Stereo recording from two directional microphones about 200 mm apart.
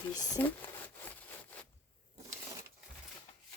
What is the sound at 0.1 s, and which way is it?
Speech, 20° left (ahead or behind).